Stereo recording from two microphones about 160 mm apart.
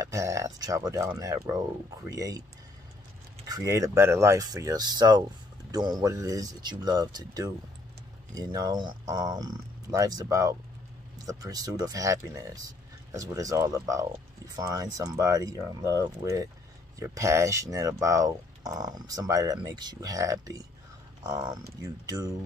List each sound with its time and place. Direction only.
0.0 s speech: 20° right (ahead or behind)
3.4 s speech: 20° right (ahead or behind)